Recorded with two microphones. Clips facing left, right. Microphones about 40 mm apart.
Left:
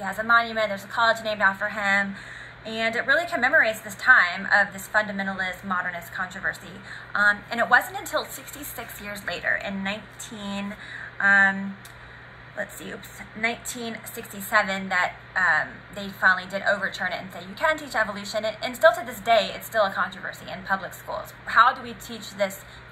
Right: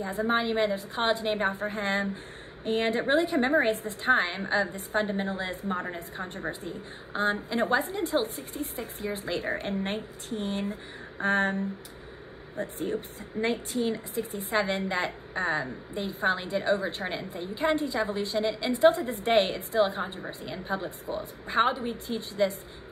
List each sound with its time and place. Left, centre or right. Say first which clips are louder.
0.0 s a woman's voice: left 1 dB; left
0.3 s a woman's voice: left 8 dB; left
0.6 s a woman's voice: left 3 dB; left
7.2 s a woman's voice: left 6 dB; left
18.7 s a woman's voice: left 3 dB; left
20.1 s a woman's voice: left 3 dB; left
20.7 s a woman's voice: left 5 dB; left
22.0 s a woman's voice: even; left